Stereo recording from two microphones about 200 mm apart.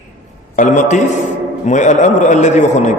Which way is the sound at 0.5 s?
40° left (ahead or behind).